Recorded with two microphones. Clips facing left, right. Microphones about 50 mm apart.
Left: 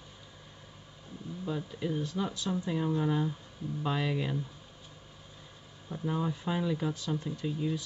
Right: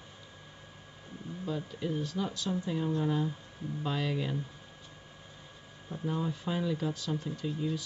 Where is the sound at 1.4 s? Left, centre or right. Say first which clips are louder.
Left 1 dB; centre.